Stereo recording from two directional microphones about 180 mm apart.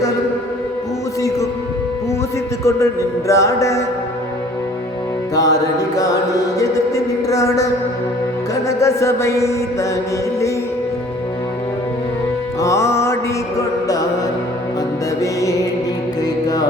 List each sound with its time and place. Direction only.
2.6 s music: 15° left (ahead or behind)
5.3 s music: 20° left (ahead or behind)
6.6 s music: 20° left (ahead or behind)
12.5 s music: 15° left (ahead or behind)
15.2 s music: 20° left (ahead or behind)